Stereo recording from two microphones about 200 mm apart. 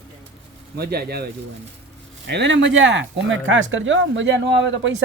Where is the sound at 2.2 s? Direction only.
65° right (ahead or behind).